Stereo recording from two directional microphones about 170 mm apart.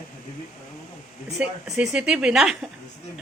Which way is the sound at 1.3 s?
5° right (ahead or behind).